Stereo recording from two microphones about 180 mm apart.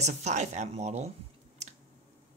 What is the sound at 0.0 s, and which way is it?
Speech, 40° right (ahead or behind).